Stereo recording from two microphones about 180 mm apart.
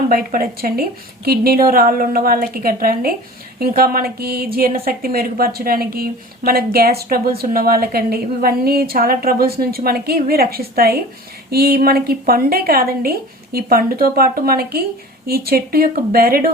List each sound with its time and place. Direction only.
0.1 s speech: 55° right (ahead or behind)